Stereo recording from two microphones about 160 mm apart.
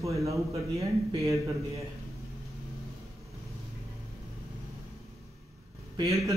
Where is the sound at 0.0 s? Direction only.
20° right (ahead or behind).